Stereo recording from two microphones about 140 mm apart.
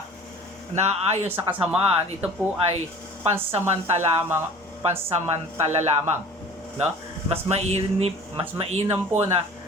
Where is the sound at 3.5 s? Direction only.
50° right (ahead or behind).